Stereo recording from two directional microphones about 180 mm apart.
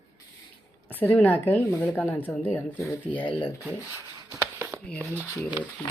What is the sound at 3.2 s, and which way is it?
Speech, 30° left (ahead or behind).